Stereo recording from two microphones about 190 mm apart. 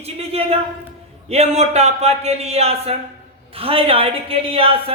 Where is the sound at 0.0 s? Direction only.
30° right (ahead or behind).